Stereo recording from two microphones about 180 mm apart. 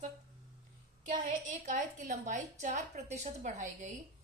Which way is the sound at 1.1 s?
45° right (ahead or behind).